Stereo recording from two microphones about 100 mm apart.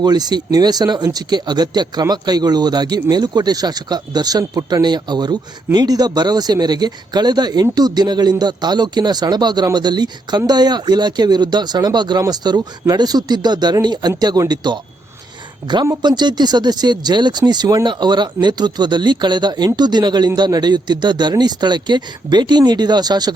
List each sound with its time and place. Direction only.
0.0 s speech: 45° right (ahead or behind)